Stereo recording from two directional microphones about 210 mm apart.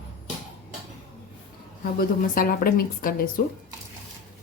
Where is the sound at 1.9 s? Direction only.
40° left (ahead or behind).